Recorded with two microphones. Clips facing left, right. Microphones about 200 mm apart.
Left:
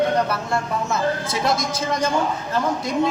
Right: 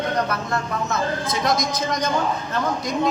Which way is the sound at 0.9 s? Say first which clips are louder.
Left 2 dB; 30° left (ahead or behind).